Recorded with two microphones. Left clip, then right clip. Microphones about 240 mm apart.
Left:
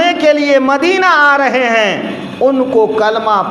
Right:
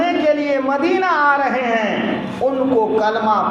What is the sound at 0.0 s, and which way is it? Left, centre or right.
A man's voice, left.